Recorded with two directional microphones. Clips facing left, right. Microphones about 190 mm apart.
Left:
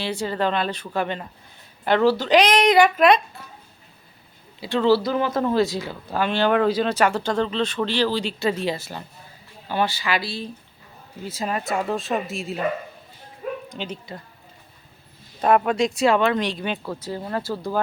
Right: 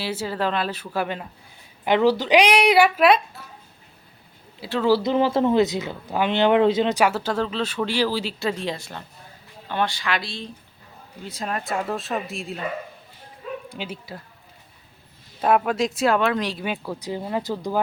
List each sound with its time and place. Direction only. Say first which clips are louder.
0.0 s speech: left 1 dB; 5° right (ahead or behind)
4.6 s speech: left 2 dB; 5° right (ahead or behind)
4.9 s speech: right 1 dB; 20° right (ahead or behind)
7.0 s speech: left 1 dB; 5° right (ahead or behind)
13.7 s speech: left 1 dB; 10° right (ahead or behind)
15.4 s speech: left 1 dB; 5° right (ahead or behind)